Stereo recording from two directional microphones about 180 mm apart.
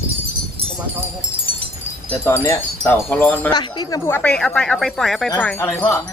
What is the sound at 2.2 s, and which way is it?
Wind chime, 10° left (ahead or behind).